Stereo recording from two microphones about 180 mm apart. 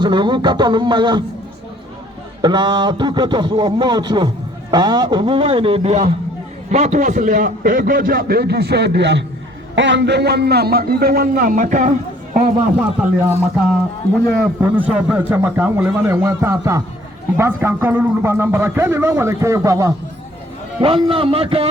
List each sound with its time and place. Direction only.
0.0 s a man's voice: 25° right (ahead or behind)
2.4 s a man's voice: 25° right (ahead or behind); by 12.5 s 45° right (ahead or behind)
12.8 s a man's voice: 5° right (ahead or behind)
20.8 s a man's voice: 30° right (ahead or behind)